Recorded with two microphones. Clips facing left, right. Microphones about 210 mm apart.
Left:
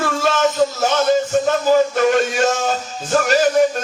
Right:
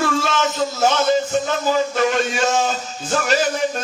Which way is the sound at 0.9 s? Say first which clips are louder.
Left 2 dB; 50° left (ahead or behind).